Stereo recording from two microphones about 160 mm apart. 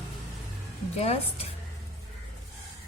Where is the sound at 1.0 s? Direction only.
40° left (ahead or behind).